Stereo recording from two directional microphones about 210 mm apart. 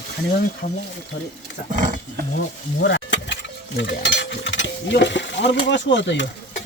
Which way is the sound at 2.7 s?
55° left (ahead or behind).